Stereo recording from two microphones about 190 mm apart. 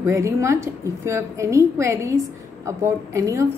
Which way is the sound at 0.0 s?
15° right (ahead or behind).